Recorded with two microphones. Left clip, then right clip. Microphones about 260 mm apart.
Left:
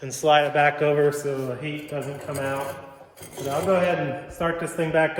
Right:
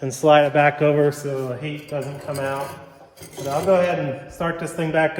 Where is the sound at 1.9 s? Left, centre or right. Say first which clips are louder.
Right 5 dB; centre.